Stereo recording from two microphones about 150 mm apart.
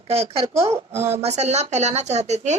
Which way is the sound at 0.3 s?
45° right (ahead or behind).